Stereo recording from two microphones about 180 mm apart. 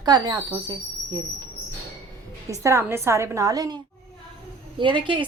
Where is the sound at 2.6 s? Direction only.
15° right (ahead or behind).